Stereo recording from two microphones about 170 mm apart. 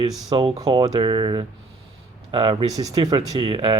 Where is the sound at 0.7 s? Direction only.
20° right (ahead or behind).